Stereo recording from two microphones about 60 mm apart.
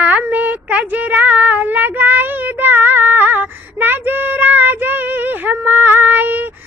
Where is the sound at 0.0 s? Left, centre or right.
Right.